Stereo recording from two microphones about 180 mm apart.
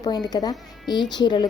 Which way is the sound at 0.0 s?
20° left (ahead or behind).